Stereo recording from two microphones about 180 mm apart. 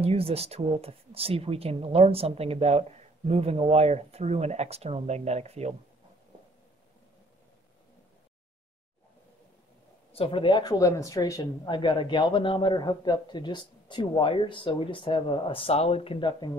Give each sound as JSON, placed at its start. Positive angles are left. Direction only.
{"t": 0.0, "sound": "speech", "side_deg": -35}
{"t": 10.1, "sound": "a woman's voice", "side_deg": 30}